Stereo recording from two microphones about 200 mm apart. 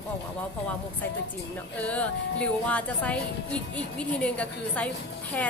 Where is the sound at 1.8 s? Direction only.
5° left (ahead or behind).